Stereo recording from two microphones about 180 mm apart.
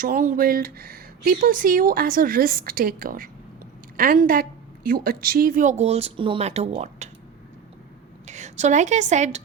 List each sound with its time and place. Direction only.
0.0 s speech: 50° right (ahead or behind)
8.3 s a woman's voice: 40° right (ahead or behind)